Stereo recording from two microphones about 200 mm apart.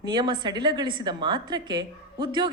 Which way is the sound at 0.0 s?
20° right (ahead or behind).